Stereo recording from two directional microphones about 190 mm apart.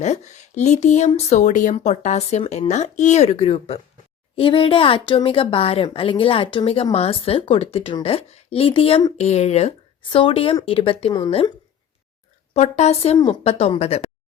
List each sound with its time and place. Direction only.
0.0 s a woman's voice: 35° left (ahead or behind)
12.5 s speech: 35° left (ahead or behind)